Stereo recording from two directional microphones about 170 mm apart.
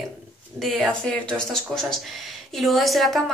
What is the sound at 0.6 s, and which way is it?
Speech, centre (ahead or behind).